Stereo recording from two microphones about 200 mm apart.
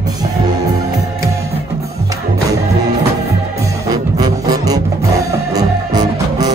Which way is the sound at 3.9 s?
20° right (ahead or behind).